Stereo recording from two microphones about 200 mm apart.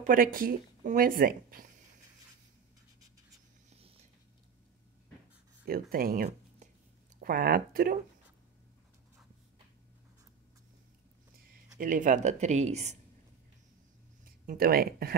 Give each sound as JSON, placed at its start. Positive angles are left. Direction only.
{"t": 0.0, "sound": "speech", "side_deg": -45}
{"t": 5.7, "sound": "speech", "side_deg": -50}
{"t": 11.8, "sound": "speech", "side_deg": -40}
{"t": 14.2, "sound": "speech", "side_deg": -45}